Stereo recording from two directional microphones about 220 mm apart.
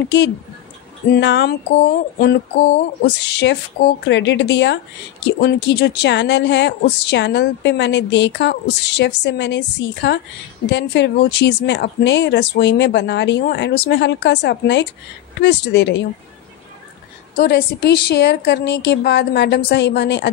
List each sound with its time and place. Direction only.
1.1 s a woman's voice: 50° left (ahead or behind)
4.1 s speech: 55° left (ahead or behind)
17.4 s speech: 45° left (ahead or behind)